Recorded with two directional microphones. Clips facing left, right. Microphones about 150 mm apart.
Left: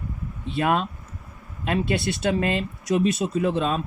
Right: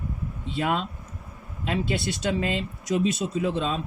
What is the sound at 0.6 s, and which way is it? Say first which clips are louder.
Speech: left 4 dB; 55° left (ahead or behind).